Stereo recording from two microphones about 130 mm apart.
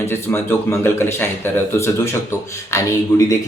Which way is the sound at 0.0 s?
15° left (ahead or behind).